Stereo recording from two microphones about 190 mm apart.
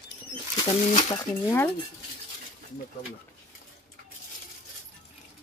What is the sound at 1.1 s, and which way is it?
Speech, 10° left (ahead or behind).